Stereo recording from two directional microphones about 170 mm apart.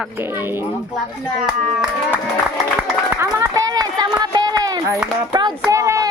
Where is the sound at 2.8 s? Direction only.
15° right (ahead or behind).